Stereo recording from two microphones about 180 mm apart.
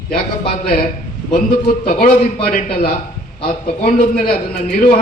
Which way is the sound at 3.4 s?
50° left (ahead or behind).